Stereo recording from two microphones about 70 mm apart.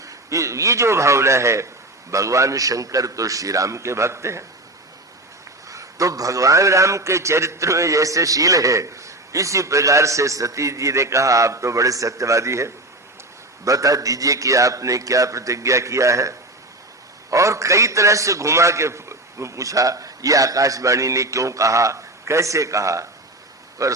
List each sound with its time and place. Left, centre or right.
0.0 s a man's voice: right
5.6 s a man's voice: right
13.7 s a man's voice: right
17.3 s a man's voice: right